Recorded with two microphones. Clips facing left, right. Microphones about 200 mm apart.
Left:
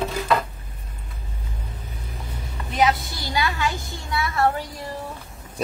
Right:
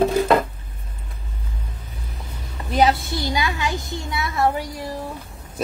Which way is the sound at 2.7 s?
35° right (ahead or behind).